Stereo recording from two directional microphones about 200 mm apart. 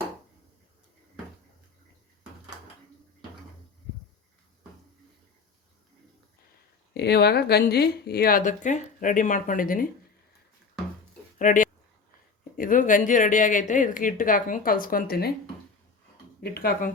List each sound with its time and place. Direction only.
6.9 s speech: 55° left (ahead or behind)
11.3 s a sound: 40° left (ahead or behind)
12.5 s speech: 40° left (ahead or behind)
16.4 s speech: 50° left (ahead or behind)